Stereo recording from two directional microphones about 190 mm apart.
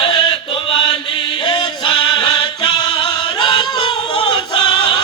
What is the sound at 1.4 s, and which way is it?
Music, 25° left (ahead or behind).